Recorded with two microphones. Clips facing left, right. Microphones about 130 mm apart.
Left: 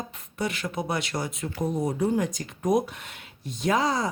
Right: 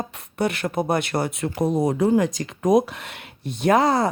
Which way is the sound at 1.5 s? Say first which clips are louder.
Right 6 dB; 90° right.